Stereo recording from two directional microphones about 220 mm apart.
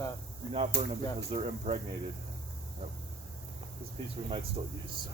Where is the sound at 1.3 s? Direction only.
30° right (ahead or behind).